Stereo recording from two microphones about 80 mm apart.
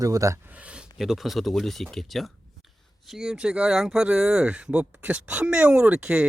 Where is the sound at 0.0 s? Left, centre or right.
Right.